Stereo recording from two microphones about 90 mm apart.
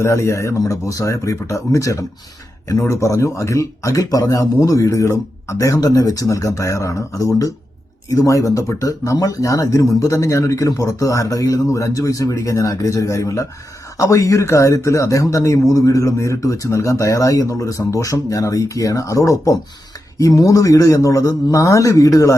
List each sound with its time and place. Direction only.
0.0 s speech: 35° left (ahead or behind)